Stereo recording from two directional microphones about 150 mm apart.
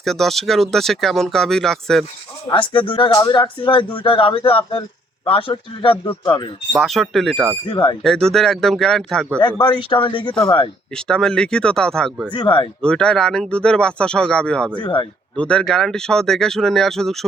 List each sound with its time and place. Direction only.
0.0 s speech: centre (ahead or behind)
2.5 s speech: 35° left (ahead or behind)
6.7 s speech: centre (ahead or behind)
7.7 s speech: 35° left (ahead or behind)
8.0 s speech: centre (ahead or behind)
9.4 s speech: 30° left (ahead or behind)
10.9 s speech: 5° left (ahead or behind)
12.3 s speech: 35° left (ahead or behind)
12.8 s speech: 5° left (ahead or behind)
14.8 s speech: 30° left (ahead or behind)
15.4 s speech: 5° left (ahead or behind)